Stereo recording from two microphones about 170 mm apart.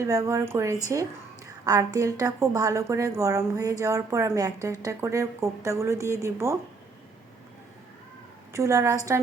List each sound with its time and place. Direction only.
0.0 s a woman's voice: 20° right (ahead or behind)
8.5 s a woman's voice: 15° right (ahead or behind)